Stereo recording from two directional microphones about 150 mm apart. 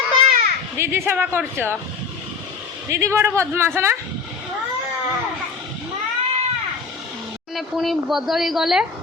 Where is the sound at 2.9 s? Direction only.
20° right (ahead or behind).